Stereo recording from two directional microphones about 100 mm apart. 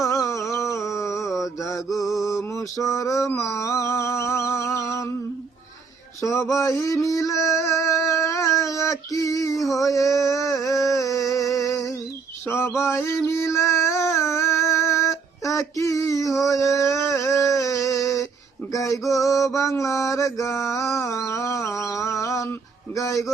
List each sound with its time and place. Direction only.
0.0 s humming: 35° left (ahead or behind)
0.9 s mantra: 30° left (ahead or behind)
1.9 s mantra: centre (ahead or behind)
2.2 s mantra: 35° left (ahead or behind)
6.2 s a sound: 30° left (ahead or behind)
18.7 s mantra: 35° left (ahead or behind)
21.2 s a sound: 35° left (ahead or behind)
21.7 s mantra: 35° left (ahead or behind)